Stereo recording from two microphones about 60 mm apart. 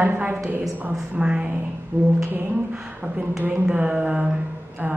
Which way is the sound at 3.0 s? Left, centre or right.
Right.